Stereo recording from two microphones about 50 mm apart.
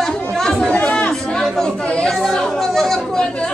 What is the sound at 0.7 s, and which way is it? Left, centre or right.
Chatter, left.